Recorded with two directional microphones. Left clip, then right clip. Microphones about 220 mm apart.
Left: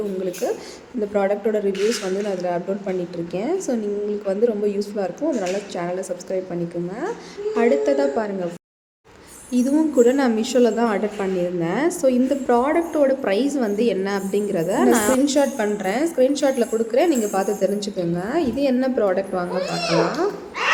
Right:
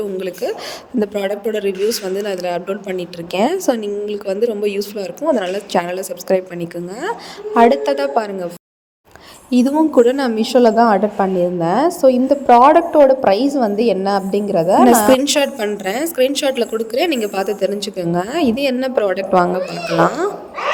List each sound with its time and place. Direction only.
0.4 s a woman's voice: 35° right (ahead or behind)
9.5 s a woman's voice: 30° right (ahead or behind); by 15.1 s 15° right (ahead or behind)
15.2 s a woman's voice: 40° right (ahead or behind)